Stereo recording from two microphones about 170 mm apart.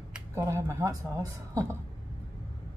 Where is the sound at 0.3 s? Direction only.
15° right (ahead or behind).